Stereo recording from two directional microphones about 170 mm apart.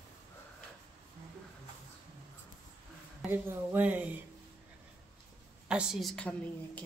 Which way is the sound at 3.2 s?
10° right (ahead or behind).